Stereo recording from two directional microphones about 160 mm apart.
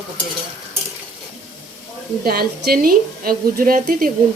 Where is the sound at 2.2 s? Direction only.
70° right (ahead or behind).